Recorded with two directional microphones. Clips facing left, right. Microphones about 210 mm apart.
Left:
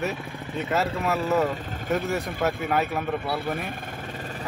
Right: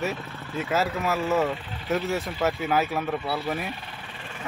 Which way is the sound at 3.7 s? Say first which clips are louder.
Left 3 dB; 50° left (ahead or behind).